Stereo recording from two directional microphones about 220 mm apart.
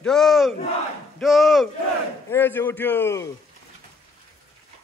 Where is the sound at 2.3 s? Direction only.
10° left (ahead or behind).